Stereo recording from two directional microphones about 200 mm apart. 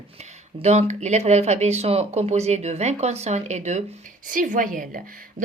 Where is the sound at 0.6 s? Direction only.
35° right (ahead or behind).